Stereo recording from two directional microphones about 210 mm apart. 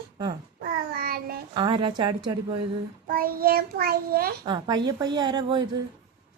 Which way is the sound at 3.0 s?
45° right (ahead or behind).